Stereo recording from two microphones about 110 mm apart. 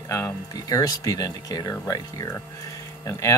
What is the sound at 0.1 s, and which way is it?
Speech, 30° left (ahead or behind).